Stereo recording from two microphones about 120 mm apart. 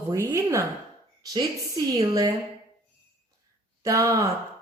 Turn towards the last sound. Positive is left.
turn(degrees=-25)  # may be behind; listen again after turning